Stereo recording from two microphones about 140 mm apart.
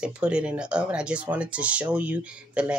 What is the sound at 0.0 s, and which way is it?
Speech, 5° right (ahead or behind).